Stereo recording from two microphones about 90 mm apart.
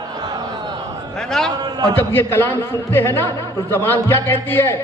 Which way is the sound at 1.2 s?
5° left (ahead or behind).